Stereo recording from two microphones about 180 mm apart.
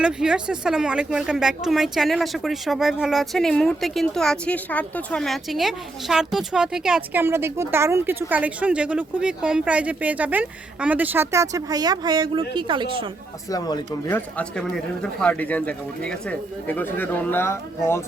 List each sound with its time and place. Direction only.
0.0 s speech: 5° right (ahead or behind); by 13.1 s 25° right (ahead or behind)
13.5 s speech: 20° left (ahead or behind)
14.1 s speech: 5° left (ahead or behind)